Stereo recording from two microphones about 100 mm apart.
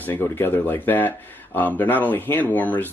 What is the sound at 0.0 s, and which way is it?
Speech, 20° left (ahead or behind).